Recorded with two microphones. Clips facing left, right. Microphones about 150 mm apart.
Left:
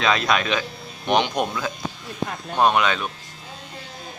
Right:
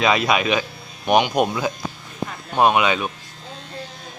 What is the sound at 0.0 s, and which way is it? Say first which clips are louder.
Speech: right 3 dB; 10° right (ahead or behind).